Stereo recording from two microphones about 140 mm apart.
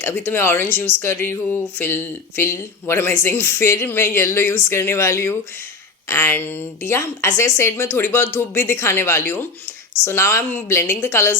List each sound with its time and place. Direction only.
0.0 s speech: 15° left (ahead or behind)